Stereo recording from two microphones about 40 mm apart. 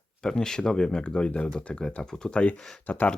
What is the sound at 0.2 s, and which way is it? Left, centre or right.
Speech, centre.